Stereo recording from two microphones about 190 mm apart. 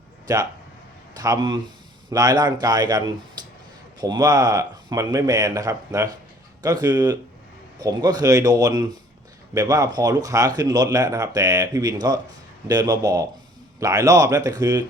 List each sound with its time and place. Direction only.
0.3 s speech: 20° right (ahead or behind)
3.4 s a sound: 20° right (ahead or behind)
4.0 s speech: 20° right (ahead or behind)